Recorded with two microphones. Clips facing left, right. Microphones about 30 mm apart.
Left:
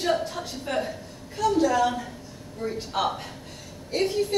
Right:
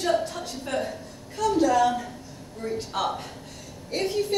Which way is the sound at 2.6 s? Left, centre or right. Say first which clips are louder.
Left 1 dB; centre.